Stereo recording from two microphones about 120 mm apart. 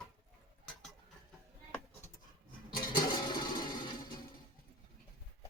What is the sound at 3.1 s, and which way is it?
Music, 40° left (ahead or behind).